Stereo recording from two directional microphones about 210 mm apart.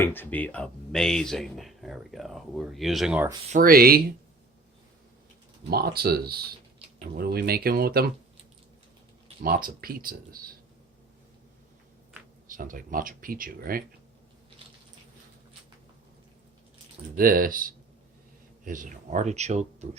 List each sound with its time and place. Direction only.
0.0 s speech: 10° left (ahead or behind)
3.5 s speech: 45° right (ahead or behind)
5.7 s speech: 50° right (ahead or behind)
9.4 s speech: 45° right (ahead or behind)
12.5 s speech: 40° right (ahead or behind)
17.2 s speech: 40° right (ahead or behind)